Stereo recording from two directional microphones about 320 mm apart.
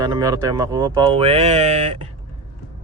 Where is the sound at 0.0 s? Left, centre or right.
Centre.